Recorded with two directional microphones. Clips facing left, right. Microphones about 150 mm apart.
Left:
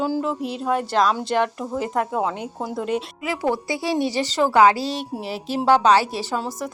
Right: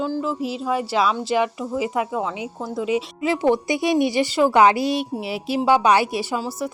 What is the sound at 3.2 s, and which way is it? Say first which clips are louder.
A woman's voice: right 4 dB; 25° right (ahead or behind).